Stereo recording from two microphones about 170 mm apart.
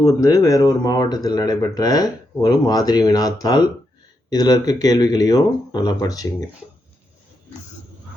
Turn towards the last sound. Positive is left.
turn(degrees=20)  # may be behind; listen again after turning